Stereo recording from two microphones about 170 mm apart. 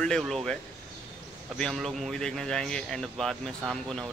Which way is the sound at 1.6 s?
Centre (ahead or behind).